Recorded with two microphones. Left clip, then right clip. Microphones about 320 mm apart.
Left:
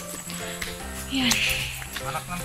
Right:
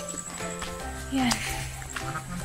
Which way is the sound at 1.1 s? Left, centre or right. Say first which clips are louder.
Left 2 dB; right.